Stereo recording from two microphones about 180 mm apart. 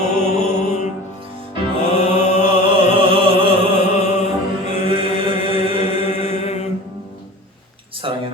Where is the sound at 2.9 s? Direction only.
30° right (ahead or behind).